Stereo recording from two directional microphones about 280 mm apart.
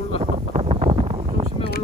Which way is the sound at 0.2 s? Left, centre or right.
Centre.